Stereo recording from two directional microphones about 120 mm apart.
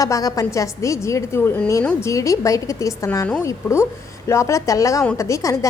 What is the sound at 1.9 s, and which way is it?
A woman's voice, 25° left (ahead or behind).